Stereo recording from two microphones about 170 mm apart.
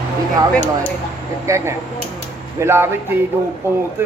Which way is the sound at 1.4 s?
15° right (ahead or behind).